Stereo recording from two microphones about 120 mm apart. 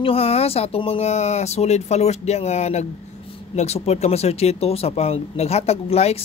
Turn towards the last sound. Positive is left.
turn(degrees=60)  # may be behind; listen again after turning